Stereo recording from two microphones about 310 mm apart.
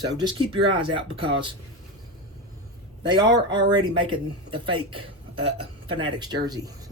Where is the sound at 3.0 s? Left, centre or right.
Centre.